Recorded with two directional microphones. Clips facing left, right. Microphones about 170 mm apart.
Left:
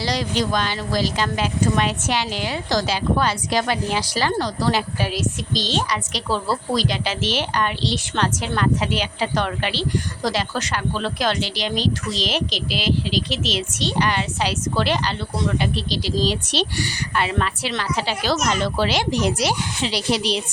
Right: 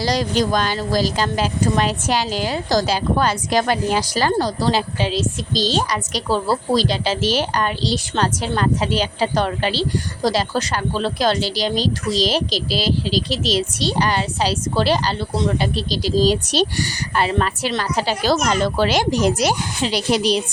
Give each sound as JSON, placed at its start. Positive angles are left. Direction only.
{"t": 0.0, "sound": "speech", "side_deg": -45}
{"t": 5.5, "sound": "speech", "side_deg": -35}